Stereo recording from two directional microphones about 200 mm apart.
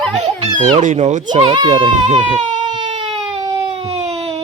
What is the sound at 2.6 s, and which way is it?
Baby cry, 25° right (ahead or behind).